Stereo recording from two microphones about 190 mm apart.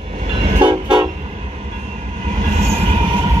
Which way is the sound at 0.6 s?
25° right (ahead or behind).